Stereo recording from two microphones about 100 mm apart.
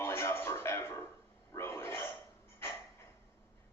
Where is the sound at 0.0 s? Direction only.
25° left (ahead or behind).